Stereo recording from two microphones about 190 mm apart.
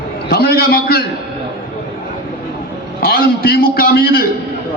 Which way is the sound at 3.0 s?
55° left (ahead or behind).